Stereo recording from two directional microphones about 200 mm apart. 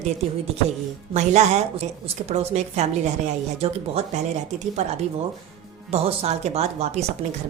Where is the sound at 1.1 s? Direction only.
30° right (ahead or behind).